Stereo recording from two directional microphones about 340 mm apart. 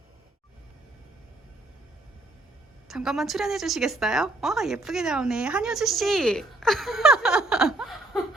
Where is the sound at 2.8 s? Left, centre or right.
Centre.